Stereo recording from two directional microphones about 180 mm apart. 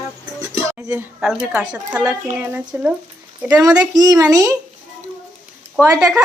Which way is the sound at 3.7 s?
20° right (ahead or behind).